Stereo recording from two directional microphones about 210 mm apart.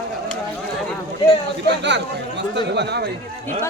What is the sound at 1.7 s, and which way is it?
Speech, 55° right (ahead or behind).